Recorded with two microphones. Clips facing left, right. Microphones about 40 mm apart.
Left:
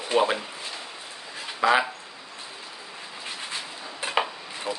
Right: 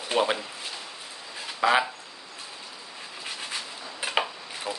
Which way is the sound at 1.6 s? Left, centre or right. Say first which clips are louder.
Left 1 dB; centre.